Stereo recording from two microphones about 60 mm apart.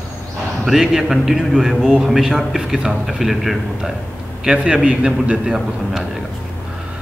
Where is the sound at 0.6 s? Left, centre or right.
Centre.